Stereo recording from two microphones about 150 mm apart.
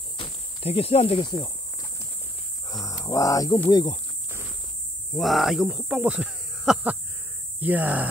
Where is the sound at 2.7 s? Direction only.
25° left (ahead or behind).